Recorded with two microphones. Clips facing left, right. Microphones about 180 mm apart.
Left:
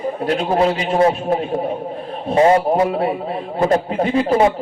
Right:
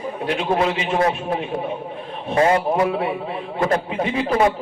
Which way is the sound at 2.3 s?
30° left (ahead or behind).